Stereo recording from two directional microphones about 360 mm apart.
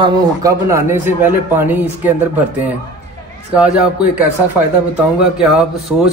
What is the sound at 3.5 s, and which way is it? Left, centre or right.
A man's voice, centre.